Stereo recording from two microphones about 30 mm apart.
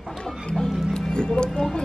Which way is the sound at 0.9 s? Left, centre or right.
Left.